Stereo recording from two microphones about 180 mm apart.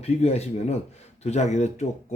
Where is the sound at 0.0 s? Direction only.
35° left (ahead or behind).